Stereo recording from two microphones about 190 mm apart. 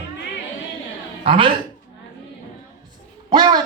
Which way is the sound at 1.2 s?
30° right (ahead or behind).